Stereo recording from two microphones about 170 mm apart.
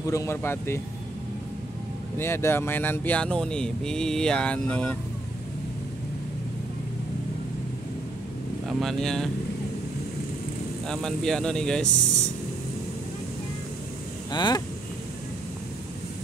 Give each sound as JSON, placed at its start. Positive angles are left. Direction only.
{"t": 0.0, "sound": "speech", "side_deg": 20}
{"t": 2.1, "sound": "speech", "side_deg": 15}
{"t": 8.6, "sound": "speech", "side_deg": 0}
{"t": 10.9, "sound": "speech", "side_deg": 5}
{"t": 14.3, "sound": "speech", "side_deg": 25}